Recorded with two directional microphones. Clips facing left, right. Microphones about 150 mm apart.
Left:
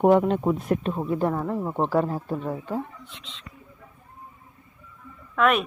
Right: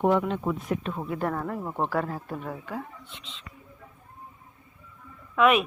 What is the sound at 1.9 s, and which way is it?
Speech, 20° left (ahead or behind).